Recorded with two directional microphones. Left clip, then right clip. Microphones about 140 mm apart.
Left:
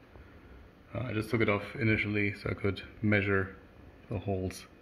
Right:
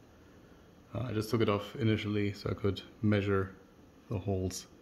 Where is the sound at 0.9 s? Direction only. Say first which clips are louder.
Left 1 dB; 10° right (ahead or behind).